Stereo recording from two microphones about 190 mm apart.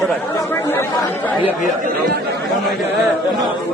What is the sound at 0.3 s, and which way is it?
Chatter, 15° left (ahead or behind).